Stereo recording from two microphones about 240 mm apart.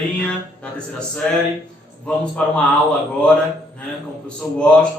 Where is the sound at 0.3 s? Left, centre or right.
Centre.